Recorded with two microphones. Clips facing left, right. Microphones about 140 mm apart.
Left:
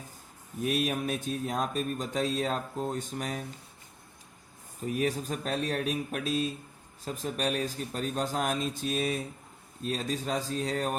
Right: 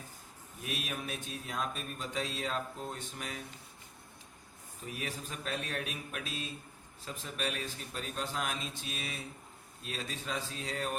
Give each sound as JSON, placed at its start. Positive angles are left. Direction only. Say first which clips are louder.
{"t": 0.6, "sound": "speech", "louder": "left 11 dB", "side_deg": 40}
{"t": 4.9, "sound": "speech", "louder": "left 11 dB", "side_deg": 40}